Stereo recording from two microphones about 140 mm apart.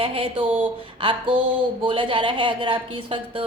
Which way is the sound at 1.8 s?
40° right (ahead or behind).